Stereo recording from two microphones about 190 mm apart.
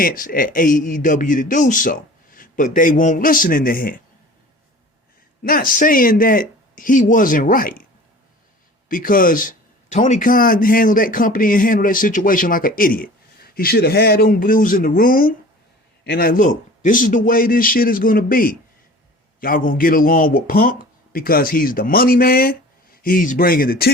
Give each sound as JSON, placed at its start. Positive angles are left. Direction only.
{"t": 0.0, "sound": "speech", "side_deg": 45}
{"t": 5.4, "sound": "speech", "side_deg": 50}
{"t": 8.9, "sound": "speech", "side_deg": 45}
{"t": 16.8, "sound": "speech", "side_deg": 45}